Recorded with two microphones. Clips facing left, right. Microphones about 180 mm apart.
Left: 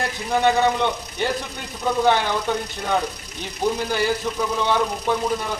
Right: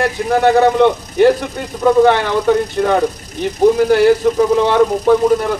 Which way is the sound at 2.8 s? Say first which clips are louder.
Right 13 dB; 90° right.